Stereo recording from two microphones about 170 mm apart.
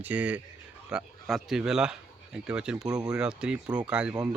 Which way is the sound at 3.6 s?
25° right (ahead or behind).